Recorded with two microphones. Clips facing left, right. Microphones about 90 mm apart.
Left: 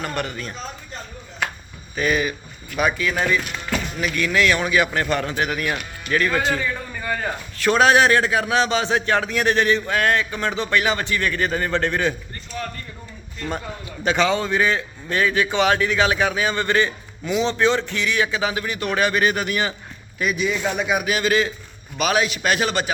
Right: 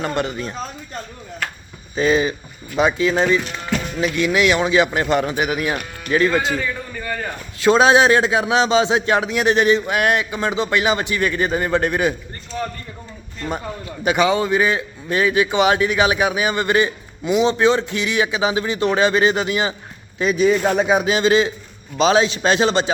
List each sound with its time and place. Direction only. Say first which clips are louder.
0.0 s speech: right 5 dB; 20° right (ahead or behind)
2.0 s speech: right 4 dB; 25° right (ahead or behind)
6.6 s a sound: right 1 dB; 5° left (ahead or behind)
7.6 s speech: right 3 dB; 20° right (ahead or behind)
14.0 s speech: right 3 dB; 10° right (ahead or behind)
20.1 s speech: right 7 dB; 35° right (ahead or behind)
20.8 s speech: right 5 dB; 30° right (ahead or behind)